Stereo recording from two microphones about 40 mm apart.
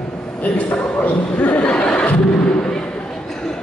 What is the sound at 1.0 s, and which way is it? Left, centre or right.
Speech, left.